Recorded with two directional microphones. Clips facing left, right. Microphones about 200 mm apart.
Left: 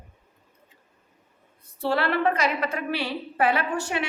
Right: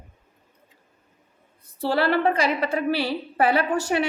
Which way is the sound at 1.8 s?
35° right (ahead or behind).